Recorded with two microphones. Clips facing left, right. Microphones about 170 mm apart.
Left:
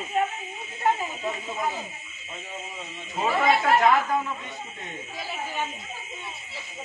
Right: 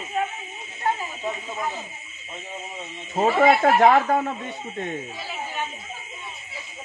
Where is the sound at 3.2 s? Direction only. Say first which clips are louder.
Right 5 dB; 55° right (ahead or behind).